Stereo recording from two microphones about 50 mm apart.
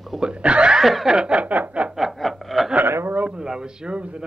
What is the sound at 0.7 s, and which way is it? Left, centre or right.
Speech, centre.